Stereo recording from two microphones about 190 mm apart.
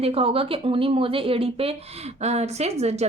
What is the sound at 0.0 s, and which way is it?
A woman's voice, 30° right (ahead or behind).